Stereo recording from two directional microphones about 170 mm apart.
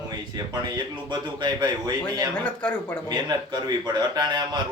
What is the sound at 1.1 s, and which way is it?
Speech, 25° right (ahead or behind).